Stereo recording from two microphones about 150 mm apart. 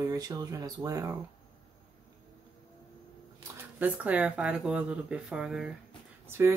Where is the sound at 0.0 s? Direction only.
25° right (ahead or behind).